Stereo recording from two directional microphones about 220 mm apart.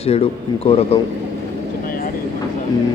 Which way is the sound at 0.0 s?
25° left (ahead or behind).